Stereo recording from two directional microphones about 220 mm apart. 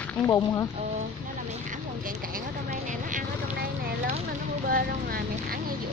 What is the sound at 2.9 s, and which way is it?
Vehicle, 35° right (ahead or behind).